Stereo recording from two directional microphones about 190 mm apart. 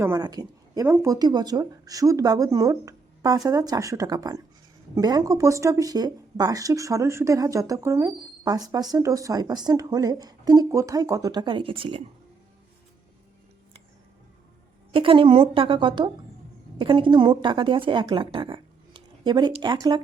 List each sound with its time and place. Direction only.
0.0 s speech: 15° right (ahead or behind)
14.9 s a woman's voice: 30° right (ahead or behind)